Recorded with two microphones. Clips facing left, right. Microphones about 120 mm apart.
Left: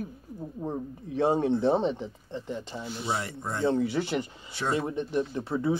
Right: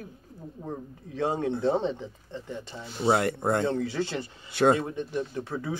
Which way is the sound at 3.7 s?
15° left (ahead or behind).